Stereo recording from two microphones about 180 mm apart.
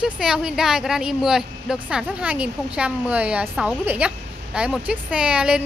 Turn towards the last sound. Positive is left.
turn(degrees=-5)  # may be behind; listen again after turning